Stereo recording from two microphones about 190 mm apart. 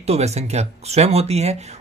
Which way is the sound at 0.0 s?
35° right (ahead or behind).